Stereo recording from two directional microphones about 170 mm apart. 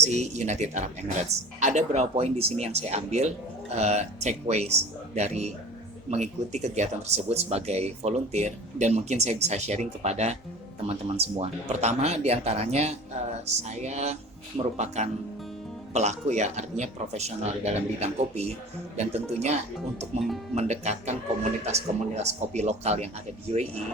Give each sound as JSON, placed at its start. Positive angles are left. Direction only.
{"t": 0.0, "sound": "speech", "side_deg": -40}
{"t": 20.1, "sound": "speech", "side_deg": 0}
{"t": 20.6, "sound": "speech", "side_deg": -40}